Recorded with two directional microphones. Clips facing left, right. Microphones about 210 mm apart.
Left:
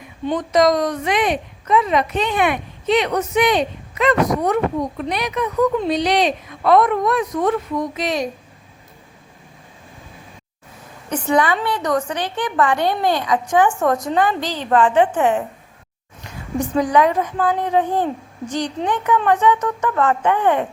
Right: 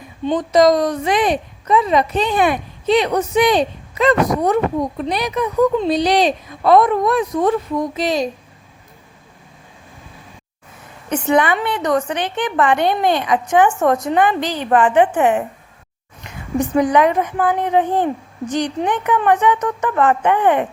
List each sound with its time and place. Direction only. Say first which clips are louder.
0.3 s a woman's voice: right 3 dB; 30° right (ahead or behind)
11.1 s a woman's voice: right 2 dB; 20° right (ahead or behind)
16.6 s a woman's voice: right 2 dB; 20° right (ahead or behind)